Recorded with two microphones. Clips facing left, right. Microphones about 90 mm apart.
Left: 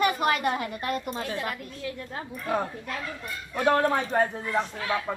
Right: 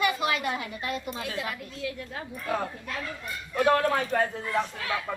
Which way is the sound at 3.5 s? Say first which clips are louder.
Even; 25° left (ahead or behind).